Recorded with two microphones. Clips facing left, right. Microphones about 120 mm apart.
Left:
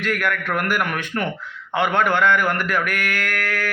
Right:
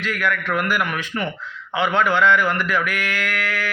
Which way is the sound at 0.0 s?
55° left (ahead or behind).